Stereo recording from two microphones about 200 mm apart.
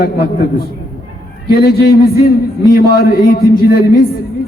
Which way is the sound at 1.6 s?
50° left (ahead or behind).